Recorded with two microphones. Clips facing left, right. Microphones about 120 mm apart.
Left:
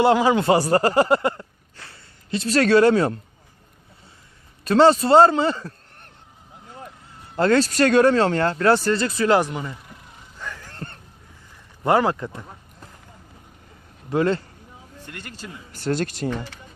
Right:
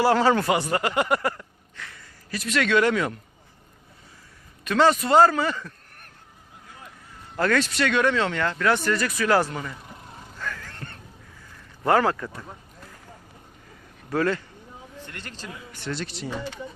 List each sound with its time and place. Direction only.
0.0 s speech: 15° left (ahead or behind)
0.4 s speech: 35° left (ahead or behind)
4.6 s a man's voice: 30° left (ahead or behind)
7.3 s speech: 30° left (ahead or behind)
7.7 s speech: 40° left (ahead or behind); by 9.7 s 20° left (ahead or behind)
10.3 s a sound: 20° left (ahead or behind)
11.8 s speech: 20° left (ahead or behind)
14.1 s speech: 20° left (ahead or behind)
15.7 s speech: 40° left (ahead or behind)